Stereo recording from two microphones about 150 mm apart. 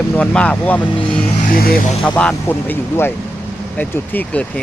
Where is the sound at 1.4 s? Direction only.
75° left (ahead or behind).